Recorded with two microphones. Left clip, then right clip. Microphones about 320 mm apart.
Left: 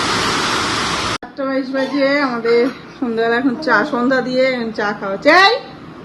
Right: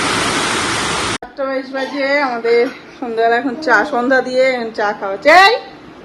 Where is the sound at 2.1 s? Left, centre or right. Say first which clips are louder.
Right 4 dB; centre.